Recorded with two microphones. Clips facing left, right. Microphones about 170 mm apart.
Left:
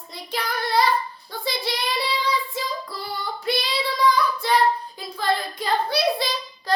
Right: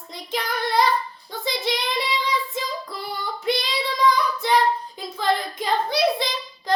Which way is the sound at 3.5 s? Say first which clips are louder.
Right 1 dB; 15° right (ahead or behind).